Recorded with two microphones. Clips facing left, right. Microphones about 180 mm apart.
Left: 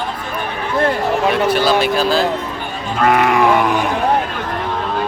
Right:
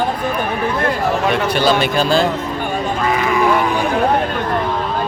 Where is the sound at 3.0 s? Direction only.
60° left (ahead or behind).